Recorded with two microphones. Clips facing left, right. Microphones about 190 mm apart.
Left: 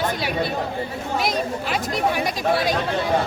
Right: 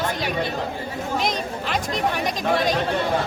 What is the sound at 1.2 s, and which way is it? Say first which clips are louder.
Speech: left 4 dB; 5° left (ahead or behind).